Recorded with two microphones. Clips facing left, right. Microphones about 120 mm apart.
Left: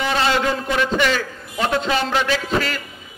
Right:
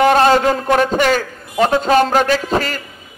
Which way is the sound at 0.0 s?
50° right (ahead or behind).